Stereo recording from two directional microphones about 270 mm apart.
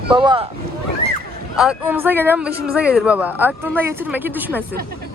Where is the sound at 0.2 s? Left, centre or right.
Centre.